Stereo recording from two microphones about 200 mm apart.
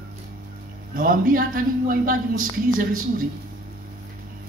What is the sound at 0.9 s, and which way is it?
A woman's voice, 45° right (ahead or behind).